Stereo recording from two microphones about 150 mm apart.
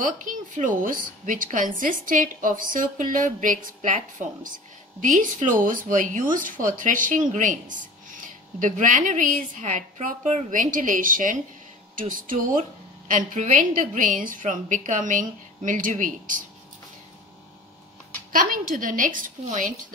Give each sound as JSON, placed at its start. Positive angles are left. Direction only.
{"t": 0.0, "sound": "a woman's voice", "side_deg": -60}
{"t": 18.3, "sound": "a woman's voice", "side_deg": -65}